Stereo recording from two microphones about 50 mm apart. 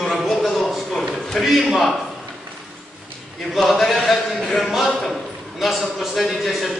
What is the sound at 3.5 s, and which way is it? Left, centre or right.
A man's voice, centre.